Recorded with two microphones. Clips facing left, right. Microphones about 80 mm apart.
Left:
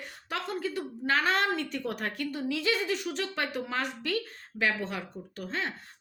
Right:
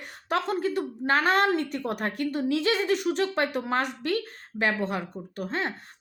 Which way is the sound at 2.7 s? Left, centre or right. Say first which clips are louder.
Right 1 dB; right.